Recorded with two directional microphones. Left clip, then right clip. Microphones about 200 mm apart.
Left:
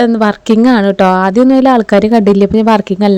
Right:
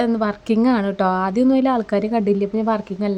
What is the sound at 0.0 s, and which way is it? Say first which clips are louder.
Speech: left 10 dB; 40° left (ahead or behind).